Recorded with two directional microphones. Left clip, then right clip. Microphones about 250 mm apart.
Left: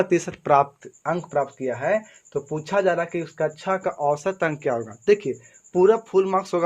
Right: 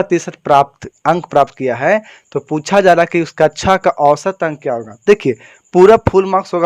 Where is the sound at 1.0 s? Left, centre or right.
Right; by 4.9 s centre.